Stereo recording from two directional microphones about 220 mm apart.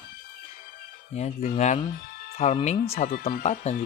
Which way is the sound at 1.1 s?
30° left (ahead or behind).